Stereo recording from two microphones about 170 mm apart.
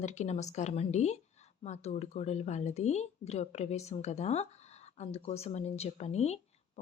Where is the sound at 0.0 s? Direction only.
45° left (ahead or behind).